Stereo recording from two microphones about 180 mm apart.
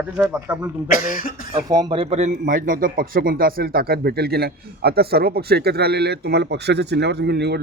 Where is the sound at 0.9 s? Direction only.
50° left (ahead or behind).